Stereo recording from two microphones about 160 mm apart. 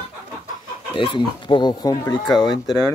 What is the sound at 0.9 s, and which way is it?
Speech, 30° left (ahead or behind).